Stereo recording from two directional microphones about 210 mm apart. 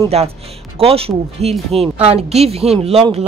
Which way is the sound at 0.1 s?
30° right (ahead or behind).